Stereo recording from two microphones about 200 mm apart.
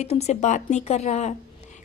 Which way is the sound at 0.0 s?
35° left (ahead or behind).